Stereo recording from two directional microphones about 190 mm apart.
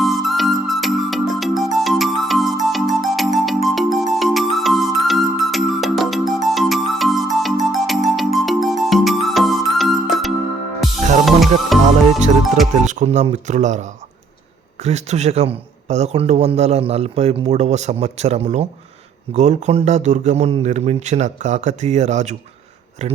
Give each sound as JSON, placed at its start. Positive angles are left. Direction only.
{"t": 0.0, "sound": "music", "side_deg": 0}
{"t": 12.8, "sound": "a man's voice", "side_deg": -40}